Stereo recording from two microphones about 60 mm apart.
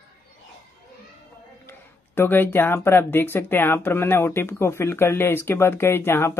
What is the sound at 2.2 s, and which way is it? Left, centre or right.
Speech, left.